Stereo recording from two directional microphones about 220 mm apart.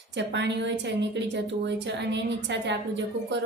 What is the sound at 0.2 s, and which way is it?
A woman's voice, 50° right (ahead or behind).